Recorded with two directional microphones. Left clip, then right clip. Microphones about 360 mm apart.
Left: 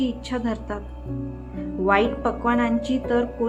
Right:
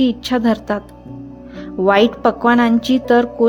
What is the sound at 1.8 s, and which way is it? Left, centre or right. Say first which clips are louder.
A woman's voice: right 8 dB; right.